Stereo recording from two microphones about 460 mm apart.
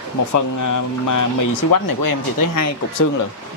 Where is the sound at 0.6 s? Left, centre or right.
Left.